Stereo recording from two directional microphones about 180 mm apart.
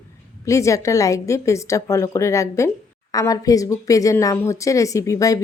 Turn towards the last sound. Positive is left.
turn(degrees=20)  # may be behind; listen again after turning